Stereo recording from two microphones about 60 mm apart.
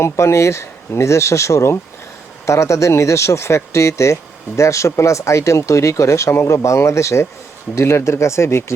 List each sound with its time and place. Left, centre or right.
0.0 s speech: left